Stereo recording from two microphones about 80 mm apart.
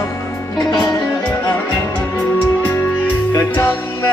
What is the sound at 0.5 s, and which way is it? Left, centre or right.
Music, left.